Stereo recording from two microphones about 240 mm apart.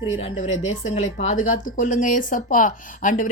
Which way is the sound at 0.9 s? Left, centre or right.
Left.